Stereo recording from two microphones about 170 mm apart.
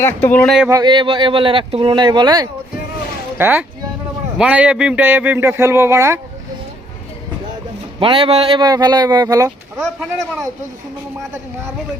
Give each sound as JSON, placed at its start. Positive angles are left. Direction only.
{"t": 0.0, "sound": "speech", "side_deg": 10}
{"t": 0.7, "sound": "speech", "side_deg": -25}
{"t": 3.3, "sound": "a man's voice", "side_deg": -10}
{"t": 7.9, "sound": "speech", "side_deg": -30}
{"t": 9.8, "sound": "speech", "side_deg": 0}